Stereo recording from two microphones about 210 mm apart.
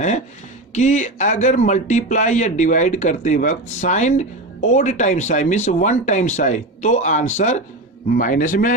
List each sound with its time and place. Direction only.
0.7 s a man's voice: 35° left (ahead or behind)